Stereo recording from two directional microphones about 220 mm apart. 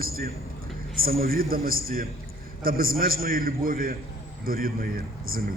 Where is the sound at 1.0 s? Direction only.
40° right (ahead or behind).